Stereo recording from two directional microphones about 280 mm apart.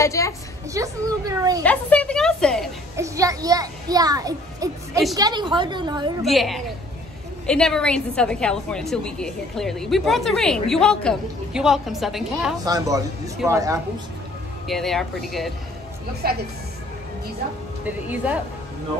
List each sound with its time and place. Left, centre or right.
0.0 s a woman's voice: centre
0.7 s a woman's voice: centre
1.6 s a woman's voice: centre
3.0 s a child's voice: centre
6.2 s a woman's voice: centre
12.6 s a woman's voice: centre
14.7 s a woman's voice: centre
16.2 s speech: right
17.8 s a woman's voice: centre